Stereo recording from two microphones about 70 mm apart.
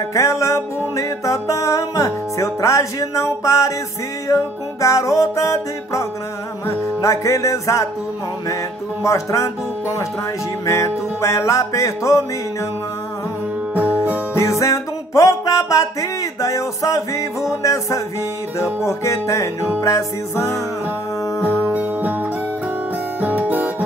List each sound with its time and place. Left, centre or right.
0.1 s music: left
9.0 s music: left
10.6 s music: left
13.7 s music: right
14.3 s music: left
21.6 s music: right
23.2 s guitar: right